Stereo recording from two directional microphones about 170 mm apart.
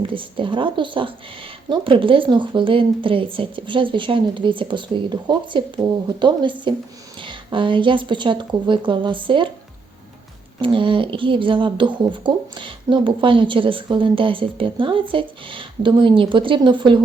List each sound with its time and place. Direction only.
0.0 s speech: 30° right (ahead or behind)
10.6 s speech: 30° right (ahead or behind)